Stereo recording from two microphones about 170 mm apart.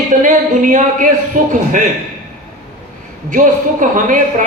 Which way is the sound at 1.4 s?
50° right (ahead or behind).